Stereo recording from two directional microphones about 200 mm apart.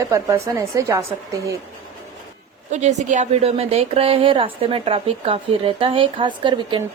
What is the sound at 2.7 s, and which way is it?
A woman's voice, 35° right (ahead or behind).